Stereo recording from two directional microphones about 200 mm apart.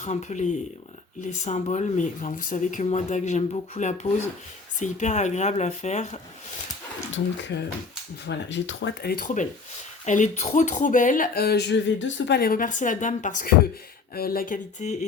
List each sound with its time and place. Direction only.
0.0 s speech: 35° left (ahead or behind)
7.5 s speech: 55° left (ahead or behind); by 14.9 s 40° left (ahead or behind)